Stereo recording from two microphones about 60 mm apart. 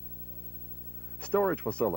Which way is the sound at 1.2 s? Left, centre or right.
Left.